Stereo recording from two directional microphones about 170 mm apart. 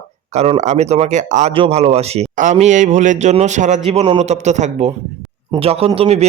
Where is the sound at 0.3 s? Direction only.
40° right (ahead or behind).